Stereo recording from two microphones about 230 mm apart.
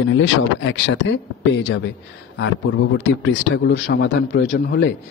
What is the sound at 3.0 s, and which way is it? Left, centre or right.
A man's voice, left.